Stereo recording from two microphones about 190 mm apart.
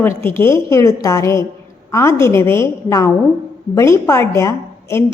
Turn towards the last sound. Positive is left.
turn(degrees=15)  # may be behind; listen again after turning